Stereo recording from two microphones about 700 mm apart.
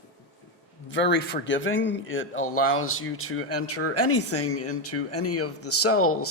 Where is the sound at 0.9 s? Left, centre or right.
Centre.